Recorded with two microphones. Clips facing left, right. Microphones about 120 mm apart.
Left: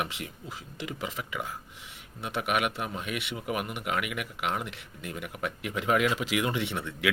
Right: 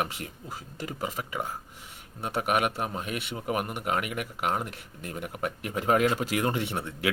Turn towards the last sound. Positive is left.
turn(degrees=-40)  # may be behind; listen again after turning